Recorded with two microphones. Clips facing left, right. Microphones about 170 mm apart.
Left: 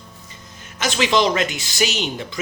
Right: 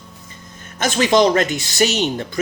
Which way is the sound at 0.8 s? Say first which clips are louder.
Right 4 dB; 45° right (ahead or behind).